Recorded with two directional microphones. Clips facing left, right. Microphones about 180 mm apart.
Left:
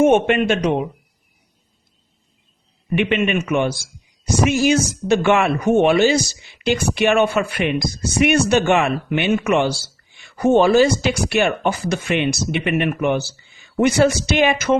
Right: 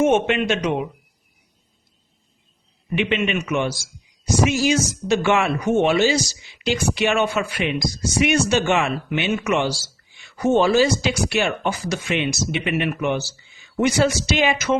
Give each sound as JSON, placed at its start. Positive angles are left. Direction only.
{"t": 0.0, "sound": "a man's voice", "side_deg": 50}
{"t": 2.9, "sound": "speech", "side_deg": 55}